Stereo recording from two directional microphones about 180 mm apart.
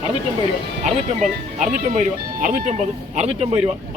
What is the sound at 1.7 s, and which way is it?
A man's voice, 40° right (ahead or behind).